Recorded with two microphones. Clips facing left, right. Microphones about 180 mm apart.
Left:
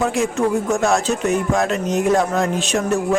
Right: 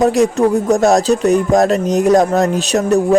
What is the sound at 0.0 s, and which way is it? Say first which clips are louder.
Speech: right 7 dB; 40° right (ahead or behind).